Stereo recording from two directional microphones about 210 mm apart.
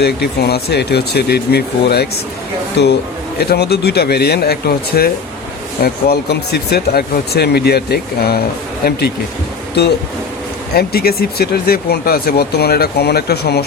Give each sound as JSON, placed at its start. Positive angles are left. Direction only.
{"t": 0.0, "sound": "speech", "side_deg": 50}
{"t": 10.8, "sound": "speech", "side_deg": 45}